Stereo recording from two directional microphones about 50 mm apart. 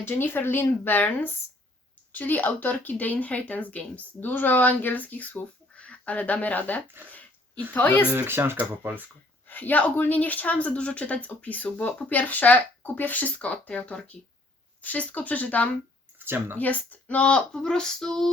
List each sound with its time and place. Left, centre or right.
0.0 s speech: left
7.1 s dog: left
7.7 s speech: left
8.1 s speech: right
9.5 s speech: left
16.1 s speech: right
16.6 s speech: left
17.2 s speech: centre